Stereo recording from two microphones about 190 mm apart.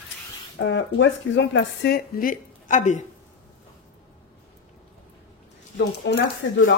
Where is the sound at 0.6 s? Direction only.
75° left (ahead or behind); by 3.0 s 40° left (ahead or behind).